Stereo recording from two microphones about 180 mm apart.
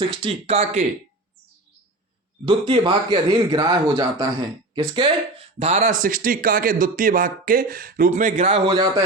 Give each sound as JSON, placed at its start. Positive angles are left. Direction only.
{"t": 0.0, "sound": "speech", "side_deg": -30}
{"t": 2.5, "sound": "speech", "side_deg": -25}
{"t": 5.5, "sound": "speech", "side_deg": -40}